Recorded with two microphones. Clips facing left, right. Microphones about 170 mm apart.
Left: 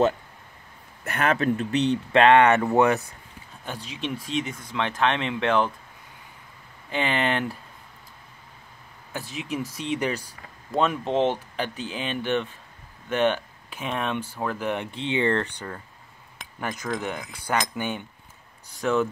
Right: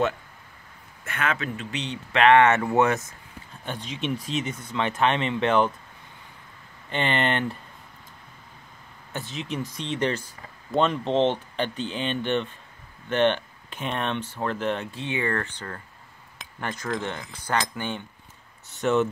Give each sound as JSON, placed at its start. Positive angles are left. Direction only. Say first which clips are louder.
{"t": 1.0, "sound": "speech", "louder": "left 5 dB", "side_deg": 40}
{"t": 2.2, "sound": "speech", "louder": "even", "side_deg": 20}
{"t": 3.8, "sound": "speech", "louder": "right 3 dB", "side_deg": 0}
{"t": 6.9, "sound": "speech", "louder": "even", "side_deg": 5}
{"t": 9.3, "sound": "speech", "louder": "left 1 dB", "side_deg": 5}
{"t": 16.5, "sound": "speech", "louder": "even", "side_deg": 10}
{"t": 18.8, "sound": "speech", "louder": "right 1 dB", "side_deg": 0}